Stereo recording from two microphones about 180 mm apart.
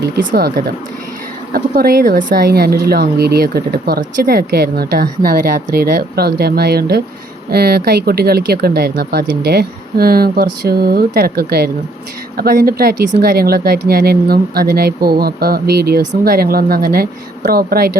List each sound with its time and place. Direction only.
0.0 s speech: 55° right (ahead or behind)